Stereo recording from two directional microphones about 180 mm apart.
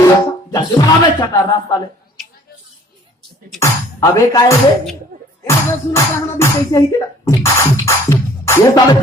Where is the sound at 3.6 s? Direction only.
20° left (ahead or behind).